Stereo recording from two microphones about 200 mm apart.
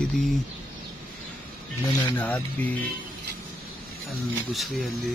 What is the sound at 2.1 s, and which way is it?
Speech, 10° left (ahead or behind).